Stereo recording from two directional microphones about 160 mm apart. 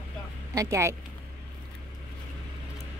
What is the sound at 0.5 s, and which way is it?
Speech, 20° right (ahead or behind).